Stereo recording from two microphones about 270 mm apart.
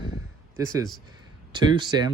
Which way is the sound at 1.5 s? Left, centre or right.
Centre.